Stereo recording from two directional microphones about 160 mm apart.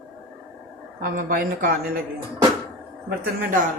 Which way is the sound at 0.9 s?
65° right (ahead or behind).